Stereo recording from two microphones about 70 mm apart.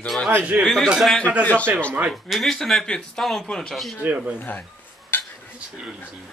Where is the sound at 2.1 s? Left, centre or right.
Centre.